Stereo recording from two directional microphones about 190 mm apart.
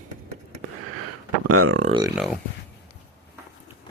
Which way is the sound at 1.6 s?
90° right.